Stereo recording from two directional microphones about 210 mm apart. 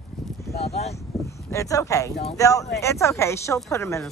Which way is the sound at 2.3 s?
15° left (ahead or behind).